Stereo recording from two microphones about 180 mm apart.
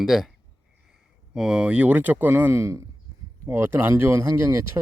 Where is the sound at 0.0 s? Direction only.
Centre (ahead or behind).